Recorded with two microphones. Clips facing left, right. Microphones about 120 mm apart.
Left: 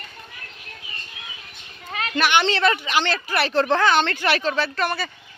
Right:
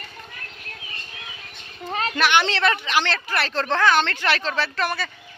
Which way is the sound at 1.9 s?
35° right (ahead or behind).